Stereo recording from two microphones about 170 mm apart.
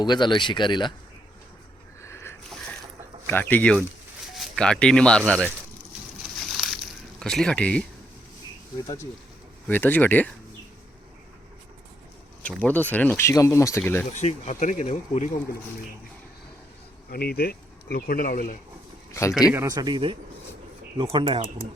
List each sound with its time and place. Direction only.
0.0 s speech: 25° left (ahead or behind)
2.0 s a sound: 15° left (ahead or behind)
3.2 s speech: 10° left (ahead or behind)
6.3 s a sound: centre (ahead or behind)
7.2 s speech: 5° left (ahead or behind)
9.6 s speech: 10° left (ahead or behind)
12.4 s speech: 5° left (ahead or behind)
14.1 s speech: 45° left (ahead or behind)
17.1 s speech: 65° left (ahead or behind)
19.3 s speech: 5° right (ahead or behind)
19.6 s a man's voice: 20° right (ahead or behind)